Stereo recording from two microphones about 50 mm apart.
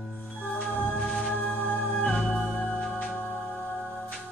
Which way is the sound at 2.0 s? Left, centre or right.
Centre.